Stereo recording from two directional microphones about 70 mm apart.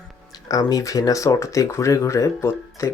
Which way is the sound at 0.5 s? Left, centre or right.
Left.